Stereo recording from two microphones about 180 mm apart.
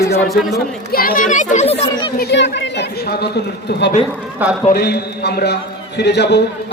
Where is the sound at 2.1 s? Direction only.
70° left (ahead or behind).